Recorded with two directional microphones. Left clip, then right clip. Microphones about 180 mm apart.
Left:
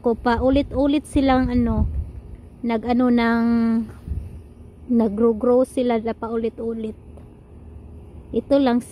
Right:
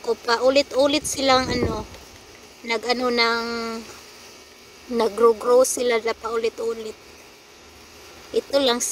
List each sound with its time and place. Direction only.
0.1 s speech: 15° left (ahead or behind)
3.3 s speech: 30° left (ahead or behind)
4.9 s speech: 10° left (ahead or behind)
8.3 s speech: 10° left (ahead or behind)